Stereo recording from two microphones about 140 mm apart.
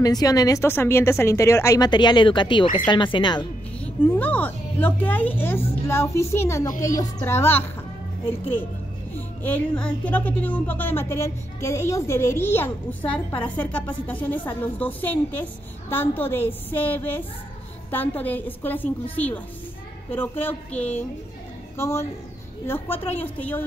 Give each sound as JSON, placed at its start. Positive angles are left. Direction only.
{"t": 0.0, "sound": "a woman's voice", "side_deg": 25}
{"t": 3.8, "sound": "speech", "side_deg": 10}
{"t": 9.1, "sound": "a woman's voice", "side_deg": 10}